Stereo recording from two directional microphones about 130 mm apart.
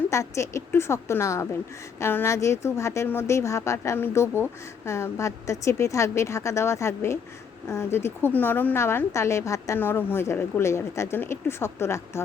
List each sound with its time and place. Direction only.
0.1 s a woman's voice: 25° left (ahead or behind)